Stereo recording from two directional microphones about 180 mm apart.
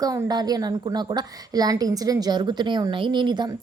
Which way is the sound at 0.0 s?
20° right (ahead or behind).